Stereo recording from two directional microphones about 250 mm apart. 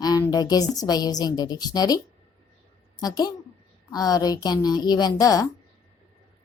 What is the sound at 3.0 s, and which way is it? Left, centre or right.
A woman's voice, centre.